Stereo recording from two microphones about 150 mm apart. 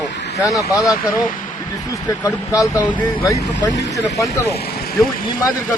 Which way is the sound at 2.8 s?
10° left (ahead or behind).